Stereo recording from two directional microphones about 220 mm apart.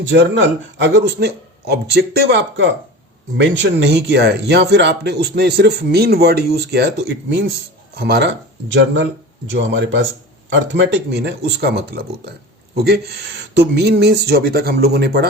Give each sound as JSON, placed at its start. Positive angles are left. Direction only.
{"t": 0.1, "sound": "a man's voice", "side_deg": -55}